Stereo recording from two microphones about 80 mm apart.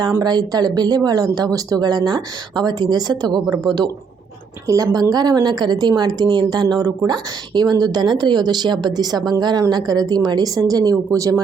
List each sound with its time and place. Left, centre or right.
0.2 s a woman's voice: right
4.6 s a woman's voice: right